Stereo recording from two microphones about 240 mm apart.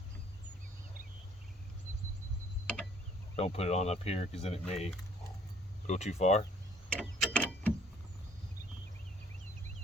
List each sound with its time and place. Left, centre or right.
3.3 s speech: left
5.9 s speech: left
6.9 s a sound: centre